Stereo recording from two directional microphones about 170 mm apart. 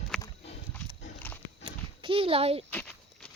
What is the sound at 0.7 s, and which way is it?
Pig, 10° left (ahead or behind).